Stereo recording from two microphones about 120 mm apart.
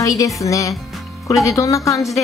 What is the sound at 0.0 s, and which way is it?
Speech, 30° left (ahead or behind).